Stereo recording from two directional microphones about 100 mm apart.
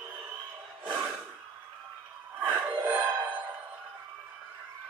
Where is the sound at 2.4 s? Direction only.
20° right (ahead or behind).